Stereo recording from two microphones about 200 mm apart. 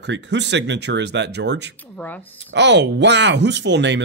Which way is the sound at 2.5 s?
60° right (ahead or behind).